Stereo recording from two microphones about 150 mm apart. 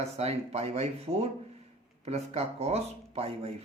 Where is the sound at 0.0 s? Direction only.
45° right (ahead or behind).